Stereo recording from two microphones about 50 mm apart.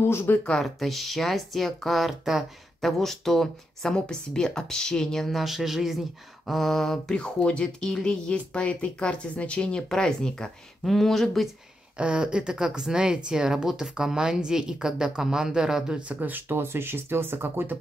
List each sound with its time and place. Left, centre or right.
0.0 s speech: left
0.5 s speech: centre
2.8 s speech: centre
7.2 s speech: left; by 11.4 s centre
12.0 s speech: right
16.1 s speech: right